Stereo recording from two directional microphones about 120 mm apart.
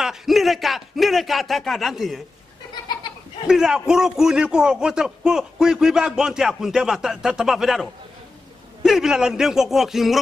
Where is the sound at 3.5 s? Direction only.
5° right (ahead or behind).